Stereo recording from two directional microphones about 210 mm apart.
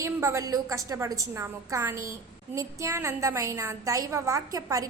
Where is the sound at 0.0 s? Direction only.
15° right (ahead or behind).